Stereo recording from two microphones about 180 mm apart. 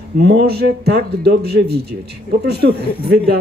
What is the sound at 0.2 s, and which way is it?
Speech, 65° right (ahead or behind).